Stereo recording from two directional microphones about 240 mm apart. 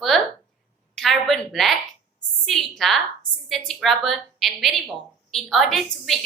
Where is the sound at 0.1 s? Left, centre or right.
Centre.